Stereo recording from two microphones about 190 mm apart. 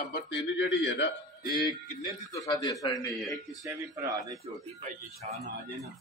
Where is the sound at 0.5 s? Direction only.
70° left (ahead or behind).